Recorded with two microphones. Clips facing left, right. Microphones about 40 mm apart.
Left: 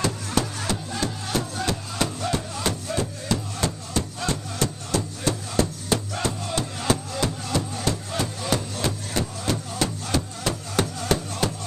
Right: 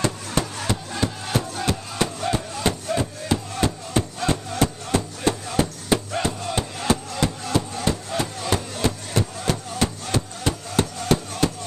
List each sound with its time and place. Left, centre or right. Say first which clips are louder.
0.0 s music: right 1 dB; centre
3.5 s music: right 4 dB; right; by 11.5 s centre